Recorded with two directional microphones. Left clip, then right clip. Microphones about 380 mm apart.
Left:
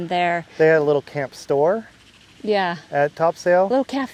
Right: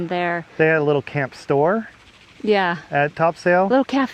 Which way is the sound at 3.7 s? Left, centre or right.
Centre.